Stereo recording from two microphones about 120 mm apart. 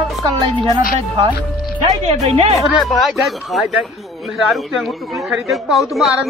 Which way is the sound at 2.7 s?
Centre (ahead or behind).